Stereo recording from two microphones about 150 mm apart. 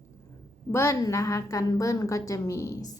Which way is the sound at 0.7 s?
20° left (ahead or behind).